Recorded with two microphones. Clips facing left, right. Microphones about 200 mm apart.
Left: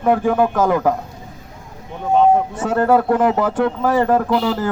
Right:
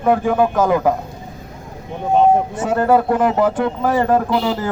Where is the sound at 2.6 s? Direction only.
15° right (ahead or behind).